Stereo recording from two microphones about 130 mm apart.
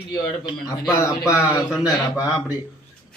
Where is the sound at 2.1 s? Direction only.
25° left (ahead or behind).